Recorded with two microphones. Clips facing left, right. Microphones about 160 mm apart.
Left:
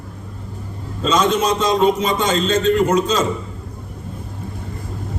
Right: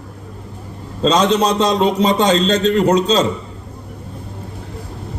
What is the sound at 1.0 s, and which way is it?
A man's voice, 35° right (ahead or behind).